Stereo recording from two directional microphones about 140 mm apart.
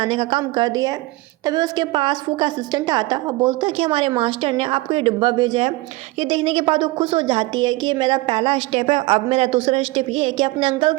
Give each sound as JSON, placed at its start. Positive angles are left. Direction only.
{"t": 0.0, "sound": "a woman's voice", "side_deg": -40}